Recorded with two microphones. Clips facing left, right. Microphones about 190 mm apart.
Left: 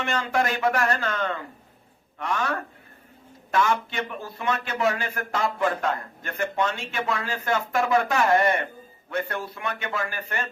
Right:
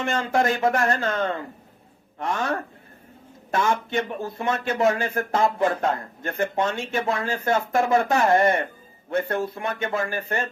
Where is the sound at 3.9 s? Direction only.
50° right (ahead or behind).